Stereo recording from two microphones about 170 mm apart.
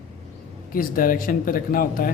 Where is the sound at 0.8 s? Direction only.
55° left (ahead or behind).